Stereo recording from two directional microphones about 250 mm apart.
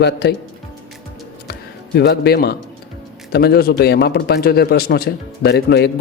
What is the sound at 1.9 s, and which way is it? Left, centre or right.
A man's voice, left.